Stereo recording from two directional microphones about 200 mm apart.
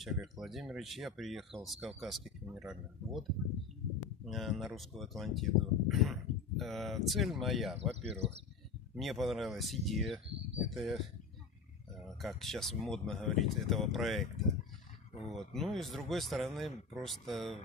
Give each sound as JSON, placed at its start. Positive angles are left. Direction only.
{"t": 0.0, "sound": "speech", "side_deg": 0}
{"t": 7.9, "sound": "speech", "side_deg": -30}
{"t": 8.9, "sound": "speech", "side_deg": 0}
{"t": 12.2, "sound": "speech", "side_deg": 0}